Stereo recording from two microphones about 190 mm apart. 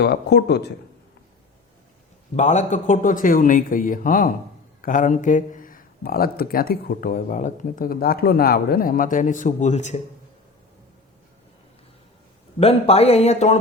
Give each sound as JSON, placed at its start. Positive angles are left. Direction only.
{"t": 0.0, "sound": "speech", "side_deg": 60}
{"t": 2.3, "sound": "speech", "side_deg": 40}
{"t": 12.5, "sound": "speech", "side_deg": 30}